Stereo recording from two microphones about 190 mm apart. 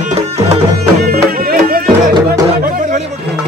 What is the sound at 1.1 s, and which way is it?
Music, 50° right (ahead or behind).